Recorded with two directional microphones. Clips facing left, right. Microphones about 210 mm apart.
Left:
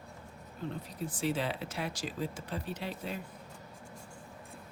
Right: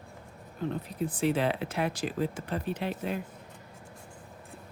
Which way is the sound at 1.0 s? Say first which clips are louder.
Right 6 dB; 60° right (ahead or behind).